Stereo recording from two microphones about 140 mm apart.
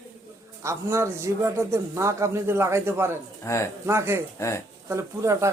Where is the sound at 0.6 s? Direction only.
20° right (ahead or behind).